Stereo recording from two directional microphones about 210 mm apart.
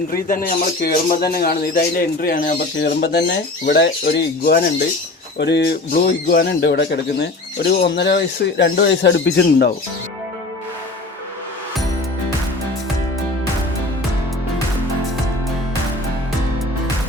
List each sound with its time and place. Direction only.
0.1 s speech: 45° left (ahead or behind)